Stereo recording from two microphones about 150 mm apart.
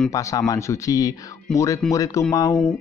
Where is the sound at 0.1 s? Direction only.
20° left (ahead or behind).